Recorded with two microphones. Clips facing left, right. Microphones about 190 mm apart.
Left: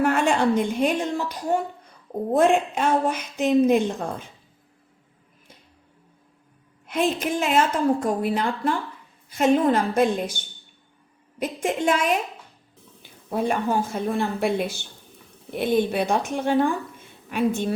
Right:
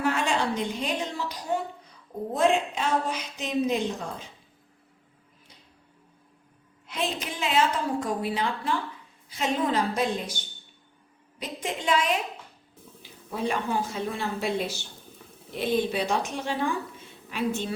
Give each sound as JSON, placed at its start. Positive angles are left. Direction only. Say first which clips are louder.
{"t": 0.0, "sound": "a woman's voice", "louder": "left 6 dB", "side_deg": 55}
{"t": 6.8, "sound": "a woman's voice", "louder": "left 8 dB", "side_deg": 50}
{"t": 11.3, "sound": "a woman's voice", "louder": "left 8 dB", "side_deg": 50}